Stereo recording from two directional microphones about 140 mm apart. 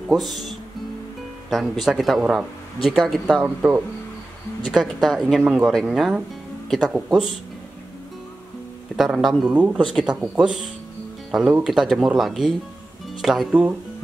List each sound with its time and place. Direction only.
0.1 s speech: centre (ahead or behind)
8.9 s speech: centre (ahead or behind)
11.6 s speech: centre (ahead or behind)